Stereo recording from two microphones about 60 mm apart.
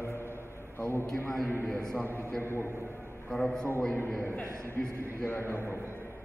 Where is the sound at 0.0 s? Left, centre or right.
Left.